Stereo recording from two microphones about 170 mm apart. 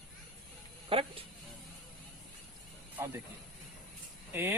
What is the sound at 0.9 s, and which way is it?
Speech, 35° right (ahead or behind).